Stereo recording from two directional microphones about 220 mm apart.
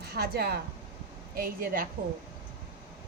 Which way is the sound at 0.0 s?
45° right (ahead or behind).